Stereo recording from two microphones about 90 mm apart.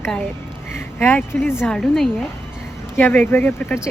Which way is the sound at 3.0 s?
25° left (ahead or behind).